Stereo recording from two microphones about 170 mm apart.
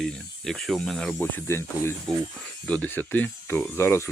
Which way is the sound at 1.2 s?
10° left (ahead or behind).